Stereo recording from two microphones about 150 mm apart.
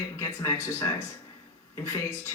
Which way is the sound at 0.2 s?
20° left (ahead or behind).